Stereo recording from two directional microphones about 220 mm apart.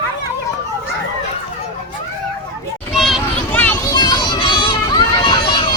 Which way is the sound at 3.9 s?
20° left (ahead or behind).